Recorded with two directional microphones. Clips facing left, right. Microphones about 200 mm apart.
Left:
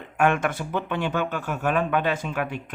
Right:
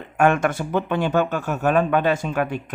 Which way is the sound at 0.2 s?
40° right (ahead or behind).